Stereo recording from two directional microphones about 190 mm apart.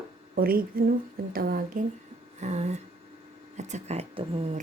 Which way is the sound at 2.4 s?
35° right (ahead or behind).